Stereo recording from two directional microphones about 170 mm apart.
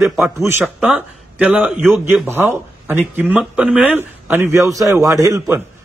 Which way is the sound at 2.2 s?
15° right (ahead or behind).